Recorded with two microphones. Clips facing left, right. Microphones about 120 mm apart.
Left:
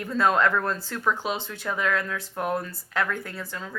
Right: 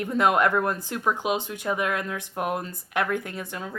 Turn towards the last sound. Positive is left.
turn(degrees=-20)  # may be behind; listen again after turning